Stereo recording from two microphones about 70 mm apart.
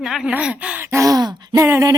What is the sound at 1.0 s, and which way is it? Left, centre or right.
Speech, right.